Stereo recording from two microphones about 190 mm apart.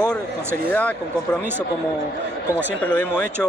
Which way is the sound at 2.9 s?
5° left (ahead or behind).